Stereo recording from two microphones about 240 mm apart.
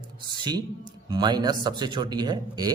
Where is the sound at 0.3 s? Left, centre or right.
Centre.